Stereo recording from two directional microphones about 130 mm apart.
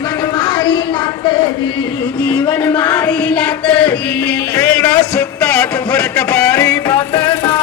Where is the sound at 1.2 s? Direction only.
35° left (ahead or behind).